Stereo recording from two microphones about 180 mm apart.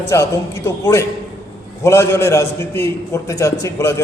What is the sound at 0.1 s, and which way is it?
A man's voice, 15° left (ahead or behind).